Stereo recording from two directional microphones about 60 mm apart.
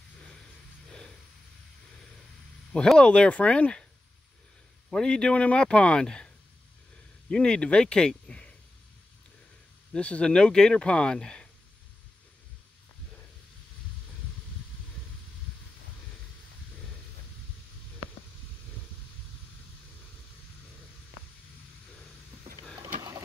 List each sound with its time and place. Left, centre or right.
3.0 s speech: centre
4.8 s speech: centre
9.9 s speech: centre